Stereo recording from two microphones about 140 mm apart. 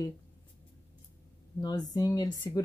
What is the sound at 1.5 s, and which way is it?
Speech, 25° left (ahead or behind).